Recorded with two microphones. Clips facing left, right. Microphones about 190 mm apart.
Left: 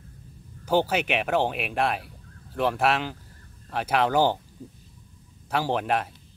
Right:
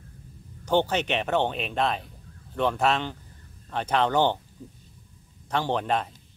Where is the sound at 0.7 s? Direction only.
5° left (ahead or behind).